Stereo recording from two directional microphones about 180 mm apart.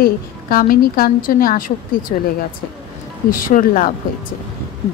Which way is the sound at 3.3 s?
50° left (ahead or behind).